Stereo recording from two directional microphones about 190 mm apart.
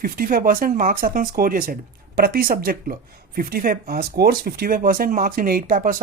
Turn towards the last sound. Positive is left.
turn(degrees=-45)  # may be behind; listen again after turning